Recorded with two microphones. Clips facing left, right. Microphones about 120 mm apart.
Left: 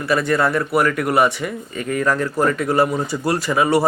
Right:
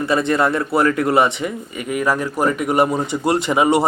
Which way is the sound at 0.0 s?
25° right (ahead or behind).